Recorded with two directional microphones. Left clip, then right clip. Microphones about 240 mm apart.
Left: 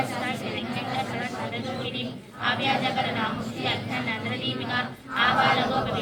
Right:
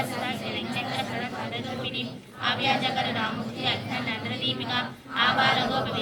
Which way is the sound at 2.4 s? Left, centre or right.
Right.